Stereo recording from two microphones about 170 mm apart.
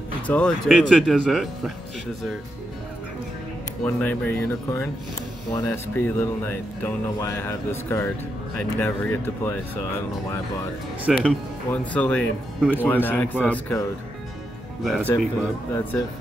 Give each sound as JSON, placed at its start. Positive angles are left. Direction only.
{"t": 0.3, "sound": "speech", "side_deg": 5}
{"t": 3.8, "sound": "speech", "side_deg": 5}
{"t": 11.1, "sound": "speech", "side_deg": -5}
{"t": 11.7, "sound": "speech", "side_deg": 10}
{"t": 15.7, "sound": "speech", "side_deg": 10}